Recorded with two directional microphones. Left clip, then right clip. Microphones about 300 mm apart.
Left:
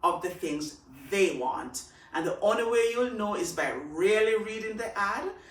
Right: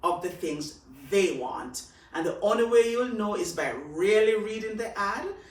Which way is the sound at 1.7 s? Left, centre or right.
Centre.